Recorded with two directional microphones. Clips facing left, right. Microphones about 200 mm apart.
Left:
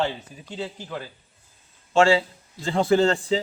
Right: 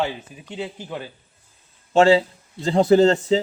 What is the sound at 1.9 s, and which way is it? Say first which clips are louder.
Speech: right 3 dB; 35° right (ahead or behind).